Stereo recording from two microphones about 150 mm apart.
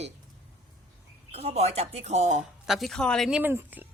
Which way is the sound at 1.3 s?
45° right (ahead or behind).